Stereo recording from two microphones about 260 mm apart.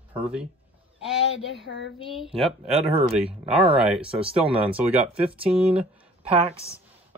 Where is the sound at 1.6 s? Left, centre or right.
Left.